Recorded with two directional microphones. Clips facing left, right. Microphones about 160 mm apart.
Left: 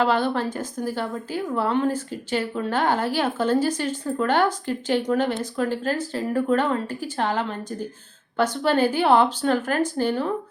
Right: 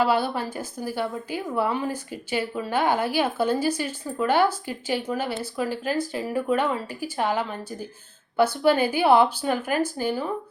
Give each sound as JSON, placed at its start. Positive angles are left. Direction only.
{"t": 0.0, "sound": "speech", "side_deg": -10}